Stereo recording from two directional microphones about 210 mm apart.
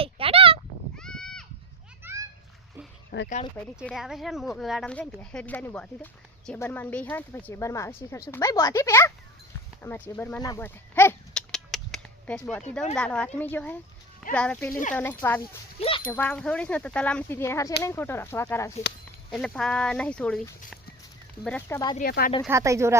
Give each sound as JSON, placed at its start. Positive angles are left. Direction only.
{"t": 0.0, "sound": "a sound", "side_deg": -25}
{"t": 0.9, "sound": "a sound", "side_deg": 5}
{"t": 3.1, "sound": "speech", "side_deg": 45}
{"t": 3.8, "sound": "speech", "side_deg": 0}
{"t": 9.8, "sound": "a sound", "side_deg": 10}
{"t": 13.0, "sound": "speech", "side_deg": 5}
{"t": 15.8, "sound": "speech", "side_deg": 25}
{"t": 16.0, "sound": "speech", "side_deg": 10}
{"t": 21.9, "sound": "speech", "side_deg": 45}
{"t": 22.4, "sound": "speech", "side_deg": -15}